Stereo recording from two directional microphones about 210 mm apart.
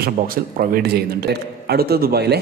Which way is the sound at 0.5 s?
45° right (ahead or behind).